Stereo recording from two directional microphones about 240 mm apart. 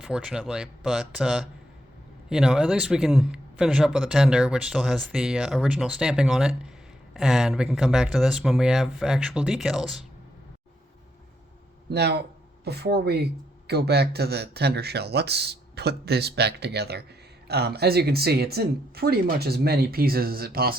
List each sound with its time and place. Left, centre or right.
0.0 s a man's voice: centre
11.9 s speech: right